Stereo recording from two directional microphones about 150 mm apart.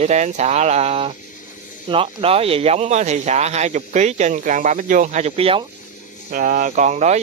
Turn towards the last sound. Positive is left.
turn(degrees=-50)  # may be behind; listen again after turning